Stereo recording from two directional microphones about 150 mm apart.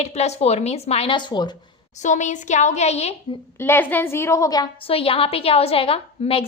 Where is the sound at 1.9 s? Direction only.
55° left (ahead or behind).